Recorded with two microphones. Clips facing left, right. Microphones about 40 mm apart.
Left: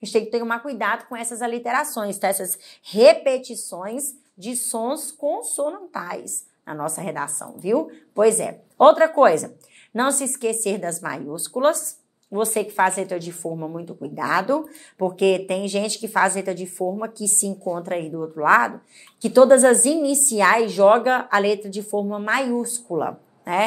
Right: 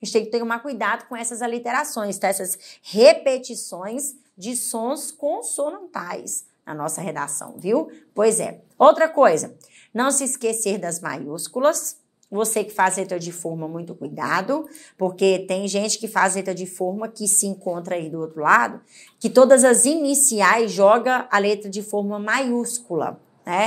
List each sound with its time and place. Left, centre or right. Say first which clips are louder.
0.0 s a woman's voice: even; left
5.6 s speech: even; centre
5.9 s a woman's voice: even; left
17.7 s a woman's voice: even; centre